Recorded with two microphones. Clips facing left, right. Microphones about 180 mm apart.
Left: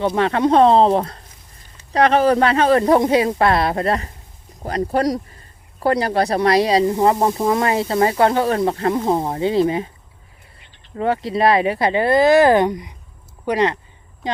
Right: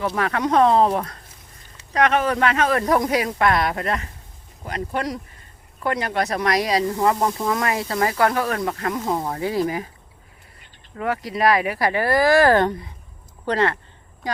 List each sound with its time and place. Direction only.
0.2 s speech: 30° left (ahead or behind)
10.9 s speech: 30° left (ahead or behind)